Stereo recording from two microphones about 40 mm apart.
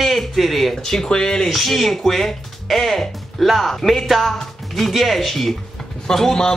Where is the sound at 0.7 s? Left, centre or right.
Centre.